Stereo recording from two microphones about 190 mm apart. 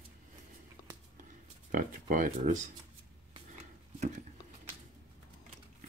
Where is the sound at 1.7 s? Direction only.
45° right (ahead or behind).